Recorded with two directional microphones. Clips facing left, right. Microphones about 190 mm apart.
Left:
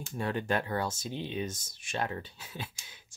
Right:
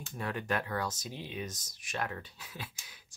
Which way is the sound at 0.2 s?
30° left (ahead or behind).